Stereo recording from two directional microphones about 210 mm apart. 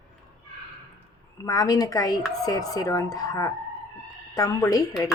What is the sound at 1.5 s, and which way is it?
A woman's voice, 15° left (ahead or behind).